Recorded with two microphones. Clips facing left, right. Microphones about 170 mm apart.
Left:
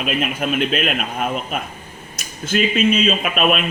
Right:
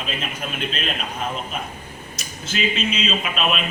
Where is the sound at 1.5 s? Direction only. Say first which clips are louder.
Left 3 dB; 55° left (ahead or behind).